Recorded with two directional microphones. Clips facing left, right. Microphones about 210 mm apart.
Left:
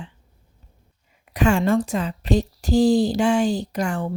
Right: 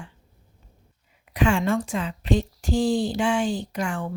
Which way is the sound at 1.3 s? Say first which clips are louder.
Left 3 dB; 45° left (ahead or behind).